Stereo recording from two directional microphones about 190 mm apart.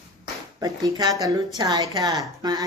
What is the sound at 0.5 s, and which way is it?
A woman's voice, 20° right (ahead or behind).